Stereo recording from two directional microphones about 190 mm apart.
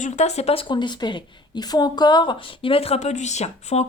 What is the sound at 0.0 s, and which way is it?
A woman's voice, 35° left (ahead or behind).